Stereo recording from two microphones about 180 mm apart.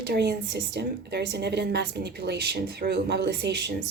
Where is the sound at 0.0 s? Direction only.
65° right (ahead or behind).